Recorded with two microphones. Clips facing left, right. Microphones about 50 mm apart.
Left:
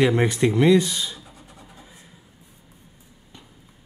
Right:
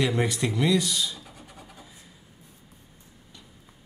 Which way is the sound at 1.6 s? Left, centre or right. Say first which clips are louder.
Left 1 dB; left.